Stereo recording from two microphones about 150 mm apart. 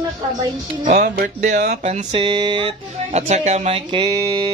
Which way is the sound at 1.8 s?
50° right (ahead or behind).